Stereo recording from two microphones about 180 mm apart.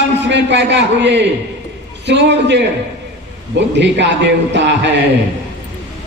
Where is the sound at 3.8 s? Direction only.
75° right (ahead or behind).